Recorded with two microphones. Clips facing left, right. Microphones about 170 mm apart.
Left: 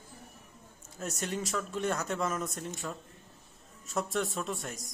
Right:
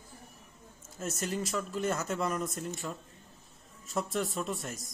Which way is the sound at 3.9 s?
Centre (ahead or behind).